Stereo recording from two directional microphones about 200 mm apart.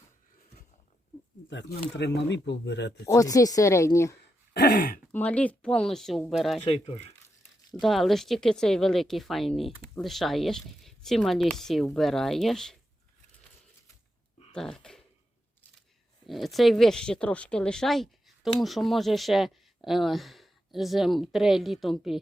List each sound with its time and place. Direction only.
1.5 s speech: 65° left (ahead or behind)
3.1 s speech: 15° left (ahead or behind)
4.2 s a sound: 55° left (ahead or behind)
5.1 s speech: 5° left (ahead or behind)
6.7 s speech: 30° left (ahead or behind)
7.8 s speech: centre (ahead or behind)
14.5 s speech: 5° left (ahead or behind)
16.2 s speech: centre (ahead or behind)